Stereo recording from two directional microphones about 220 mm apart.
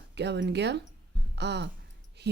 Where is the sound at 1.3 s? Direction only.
50° right (ahead or behind).